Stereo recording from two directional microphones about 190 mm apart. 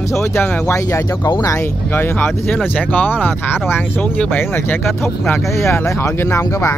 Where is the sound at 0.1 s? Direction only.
15° left (ahead or behind).